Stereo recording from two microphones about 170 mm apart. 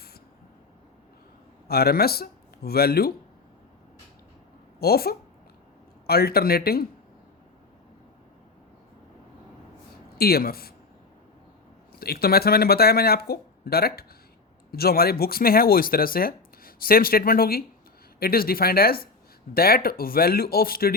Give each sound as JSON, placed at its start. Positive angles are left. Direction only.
{"t": 1.6, "sound": "speech", "side_deg": 65}
{"t": 4.8, "sound": "speech", "side_deg": 65}
{"t": 10.2, "sound": "speech", "side_deg": 65}
{"t": 11.9, "sound": "speech", "side_deg": 65}